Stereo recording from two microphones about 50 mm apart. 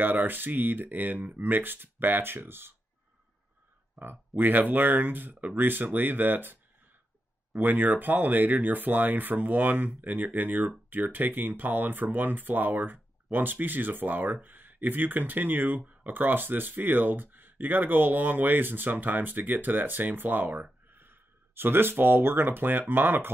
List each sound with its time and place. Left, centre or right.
0.0 s speech: right
4.3 s speech: right